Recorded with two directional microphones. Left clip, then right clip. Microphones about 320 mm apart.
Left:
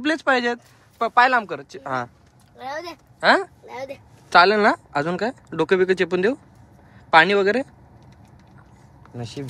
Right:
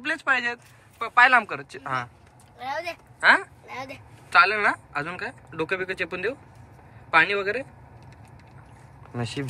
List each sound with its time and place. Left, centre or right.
0.0 s speech: centre
9.1 s speech: centre